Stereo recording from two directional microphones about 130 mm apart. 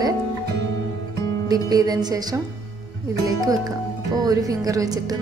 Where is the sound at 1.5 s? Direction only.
30° right (ahead or behind).